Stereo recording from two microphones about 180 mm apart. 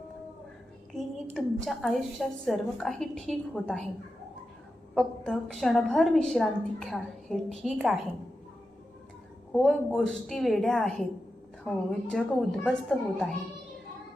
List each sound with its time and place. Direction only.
0.9 s a woman's voice: centre (ahead or behind)
4.9 s a woman's voice: 5° left (ahead or behind)
9.5 s a woman's voice: centre (ahead or behind)